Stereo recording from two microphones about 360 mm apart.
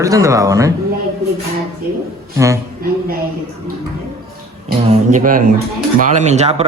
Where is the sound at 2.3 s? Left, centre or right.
Centre.